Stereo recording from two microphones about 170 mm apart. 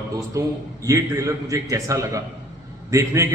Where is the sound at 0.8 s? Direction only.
20° right (ahead or behind).